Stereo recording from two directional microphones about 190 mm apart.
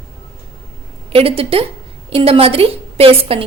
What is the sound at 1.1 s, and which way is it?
A woman's voice, 30° right (ahead or behind).